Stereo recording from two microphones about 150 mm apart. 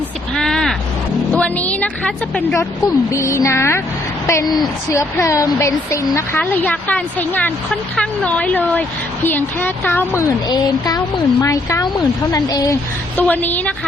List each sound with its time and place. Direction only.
0.3 s caw: 5° left (ahead or behind)
1.3 s music: 10° left (ahead or behind)
2.6 s a woman's voice: 20° left (ahead or behind)
10.5 s a woman's voice: 25° left (ahead or behind)
13.1 s speech: 10° left (ahead or behind)